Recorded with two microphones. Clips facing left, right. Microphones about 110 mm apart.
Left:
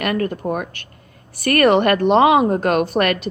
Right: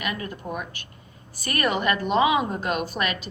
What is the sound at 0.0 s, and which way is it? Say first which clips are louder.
A woman's voice: left 10 dB; 55° left (ahead or behind).